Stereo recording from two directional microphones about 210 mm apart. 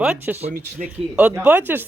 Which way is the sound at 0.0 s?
5° right (ahead or behind).